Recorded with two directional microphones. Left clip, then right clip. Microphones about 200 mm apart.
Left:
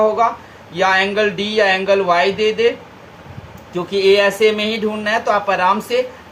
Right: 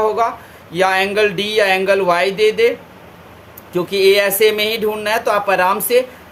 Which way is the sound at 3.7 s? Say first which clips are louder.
Right 1 dB; 60° right (ahead or behind).